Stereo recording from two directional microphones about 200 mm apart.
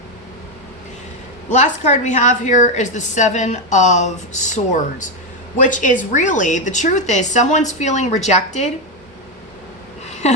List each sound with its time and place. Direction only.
1.5 s a woman's voice: 35° left (ahead or behind)
10.2 s a woman's voice: 35° left (ahead or behind)